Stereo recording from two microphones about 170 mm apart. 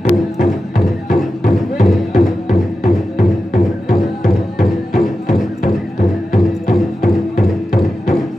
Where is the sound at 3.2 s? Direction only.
55° left (ahead or behind).